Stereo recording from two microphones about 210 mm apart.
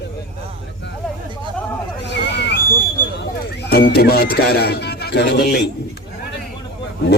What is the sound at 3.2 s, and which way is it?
Speech, 55° left (ahead or behind).